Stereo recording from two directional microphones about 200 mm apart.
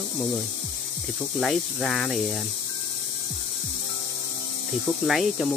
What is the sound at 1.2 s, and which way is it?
Speech, centre (ahead or behind).